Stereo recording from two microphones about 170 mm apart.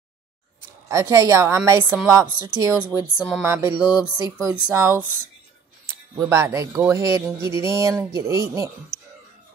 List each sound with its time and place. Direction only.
0.8 s a woman's voice: 15° right (ahead or behind)
8.9 s music: 35° right (ahead or behind)